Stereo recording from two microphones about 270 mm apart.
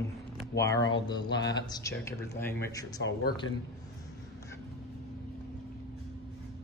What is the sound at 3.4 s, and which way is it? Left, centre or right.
Speech, left.